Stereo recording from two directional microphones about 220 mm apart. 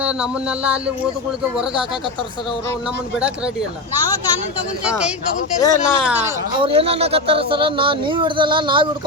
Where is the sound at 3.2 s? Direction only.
5° right (ahead or behind).